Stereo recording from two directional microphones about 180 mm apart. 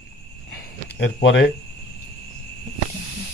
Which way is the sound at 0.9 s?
80° left.